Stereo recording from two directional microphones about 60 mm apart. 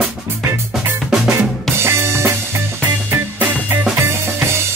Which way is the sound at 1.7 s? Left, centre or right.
Right.